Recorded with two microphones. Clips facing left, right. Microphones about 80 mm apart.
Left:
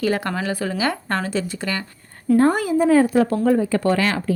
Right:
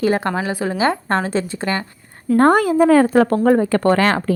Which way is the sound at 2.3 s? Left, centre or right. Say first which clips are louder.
Right 3 dB; right.